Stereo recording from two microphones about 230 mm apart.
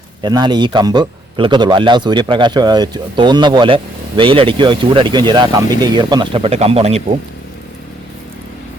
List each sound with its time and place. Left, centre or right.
0.2 s a man's voice: centre